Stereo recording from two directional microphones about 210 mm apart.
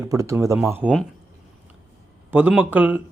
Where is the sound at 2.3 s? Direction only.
5° right (ahead or behind).